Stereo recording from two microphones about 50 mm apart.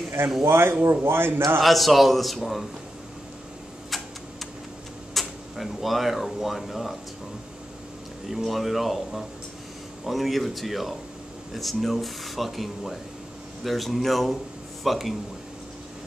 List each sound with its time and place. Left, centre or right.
0.4 s a man's voice: right
1.6 s speech: centre
3.9 s a sound: centre
5.1 s speech: centre
8.3 s speech: centre